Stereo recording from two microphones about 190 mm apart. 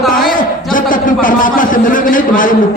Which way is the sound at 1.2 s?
45° left (ahead or behind).